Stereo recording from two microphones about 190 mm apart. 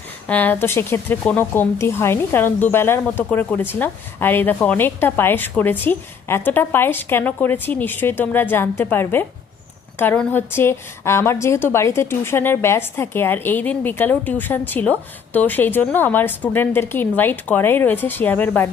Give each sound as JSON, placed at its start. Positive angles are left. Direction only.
{"t": 0.3, "sound": "speech", "side_deg": 10}